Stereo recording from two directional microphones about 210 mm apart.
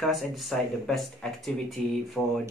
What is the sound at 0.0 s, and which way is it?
Speech, centre (ahead or behind).